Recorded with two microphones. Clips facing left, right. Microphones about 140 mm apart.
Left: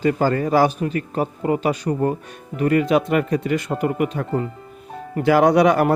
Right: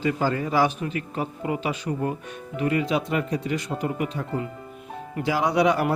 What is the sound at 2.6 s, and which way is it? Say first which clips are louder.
A man's voice: left 6 dB; 55° left (ahead or behind).